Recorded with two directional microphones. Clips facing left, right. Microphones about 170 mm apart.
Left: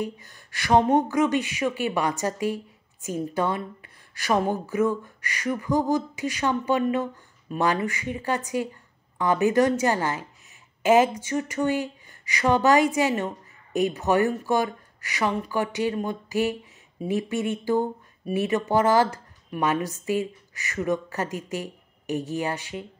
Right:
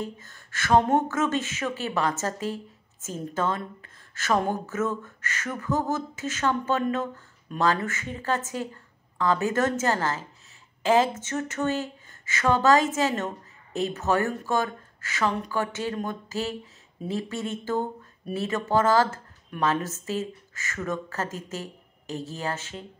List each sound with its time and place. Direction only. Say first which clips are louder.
0.0 s speech: left 4 dB; 15° left (ahead or behind)